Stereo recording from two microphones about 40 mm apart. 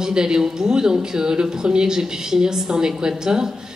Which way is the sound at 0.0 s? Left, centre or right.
Centre.